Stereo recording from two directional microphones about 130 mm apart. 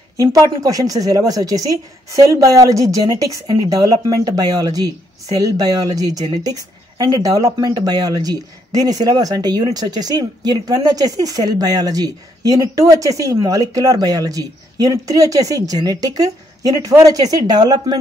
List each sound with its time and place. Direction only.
0.2 s a woman's voice: 30° right (ahead or behind)